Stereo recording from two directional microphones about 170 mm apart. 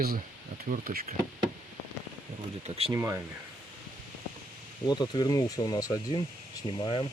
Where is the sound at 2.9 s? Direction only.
15° right (ahead or behind).